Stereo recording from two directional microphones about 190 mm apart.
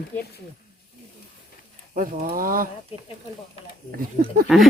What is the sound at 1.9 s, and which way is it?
Speech, 50° right (ahead or behind).